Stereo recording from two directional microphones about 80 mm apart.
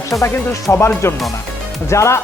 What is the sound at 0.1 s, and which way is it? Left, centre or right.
Speech, left.